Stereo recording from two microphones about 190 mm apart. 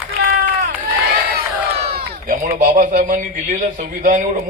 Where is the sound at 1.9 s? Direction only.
50° right (ahead or behind).